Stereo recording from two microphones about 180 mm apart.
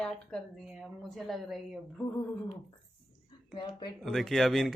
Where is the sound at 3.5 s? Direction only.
25° left (ahead or behind).